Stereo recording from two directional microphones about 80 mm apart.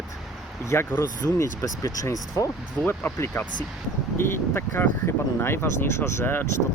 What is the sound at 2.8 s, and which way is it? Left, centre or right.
Speech, left.